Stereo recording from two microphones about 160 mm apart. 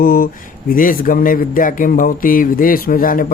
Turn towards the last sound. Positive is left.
turn(degrees=60)  # may be behind; listen again after turning